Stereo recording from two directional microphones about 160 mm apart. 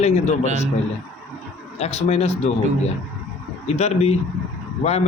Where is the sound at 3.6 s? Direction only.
40° left (ahead or behind).